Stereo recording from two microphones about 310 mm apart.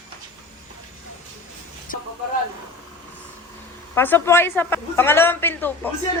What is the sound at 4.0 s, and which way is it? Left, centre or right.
A man's voice, centre.